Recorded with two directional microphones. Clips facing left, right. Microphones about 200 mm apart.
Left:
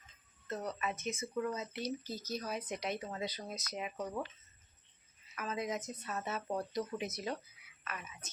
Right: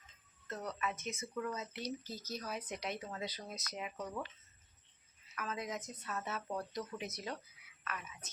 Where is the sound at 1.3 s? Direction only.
20° left (ahead or behind).